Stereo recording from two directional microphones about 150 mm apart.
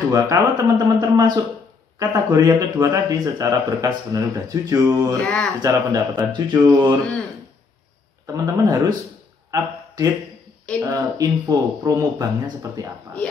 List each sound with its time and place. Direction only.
0.1 s a man's voice: 25° right (ahead or behind)
5.2 s speech: 5° left (ahead or behind)
5.6 s a man's voice: 25° right (ahead or behind)
8.3 s a man's voice: 20° right (ahead or behind)
9.5 s a sound: 25° right (ahead or behind)
10.8 s a man's voice: 25° right (ahead or behind)